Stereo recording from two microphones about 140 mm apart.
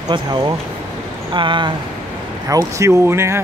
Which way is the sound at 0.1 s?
30° right (ahead or behind).